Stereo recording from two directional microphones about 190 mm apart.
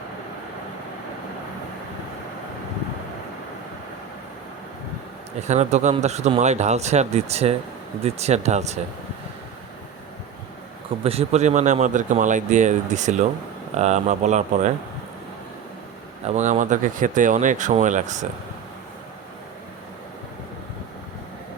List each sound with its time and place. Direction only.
5.4 s speech: 35° right (ahead or behind)
11.0 s speech: 30° right (ahead or behind)
16.2 s speech: 40° right (ahead or behind)